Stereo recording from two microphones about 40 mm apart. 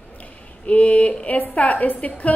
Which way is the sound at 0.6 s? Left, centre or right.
Left.